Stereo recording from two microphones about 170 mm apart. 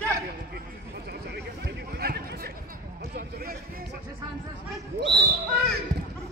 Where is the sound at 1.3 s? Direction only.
70° right (ahead or behind).